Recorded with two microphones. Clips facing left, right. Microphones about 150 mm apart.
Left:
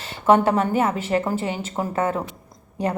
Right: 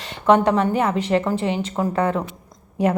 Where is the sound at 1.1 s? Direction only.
30° left (ahead or behind).